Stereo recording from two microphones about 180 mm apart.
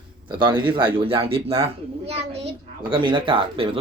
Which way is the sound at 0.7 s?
30° right (ahead or behind).